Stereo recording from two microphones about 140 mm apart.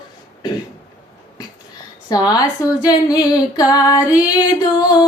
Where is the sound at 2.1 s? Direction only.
25° left (ahead or behind).